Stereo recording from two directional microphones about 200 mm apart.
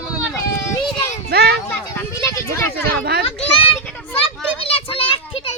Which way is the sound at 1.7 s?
10° left (ahead or behind).